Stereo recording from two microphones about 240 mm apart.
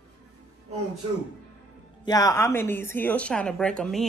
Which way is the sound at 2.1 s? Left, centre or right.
Centre.